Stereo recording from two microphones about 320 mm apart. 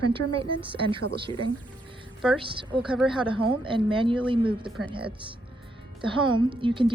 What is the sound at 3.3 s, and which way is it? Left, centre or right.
A woman's voice, centre.